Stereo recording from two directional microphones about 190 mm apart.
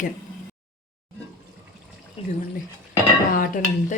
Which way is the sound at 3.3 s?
45° left (ahead or behind).